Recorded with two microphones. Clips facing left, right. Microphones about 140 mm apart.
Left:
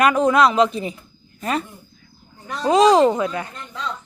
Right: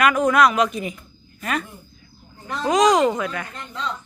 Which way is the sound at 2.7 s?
30° left (ahead or behind).